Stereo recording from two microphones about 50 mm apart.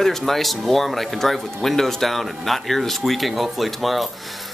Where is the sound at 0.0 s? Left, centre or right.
Centre.